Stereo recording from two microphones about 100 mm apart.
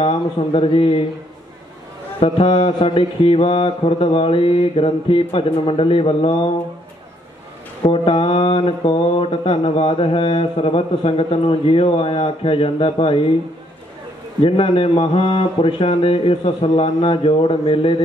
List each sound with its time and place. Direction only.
0.0 s mantra: 75° left (ahead or behind)
2.1 s mantra: 65° left (ahead or behind)
7.8 s mantra: 65° left (ahead or behind)
14.4 s mantra: 65° left (ahead or behind)